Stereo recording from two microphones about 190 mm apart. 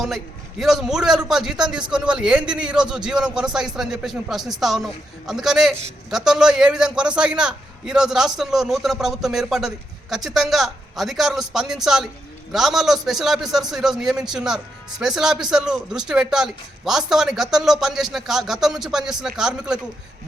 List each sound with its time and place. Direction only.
0.6 s a man's voice: centre (ahead or behind)